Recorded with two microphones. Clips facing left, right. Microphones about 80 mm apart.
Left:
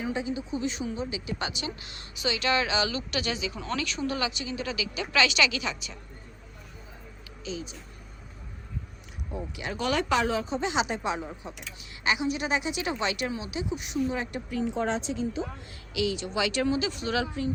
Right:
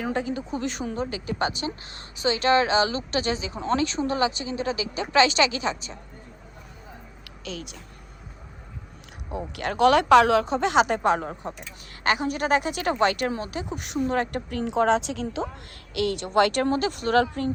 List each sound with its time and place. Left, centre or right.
0.0 s a woman's voice: right
7.4 s speech: right
9.3 s speech: right
16.0 s speech: right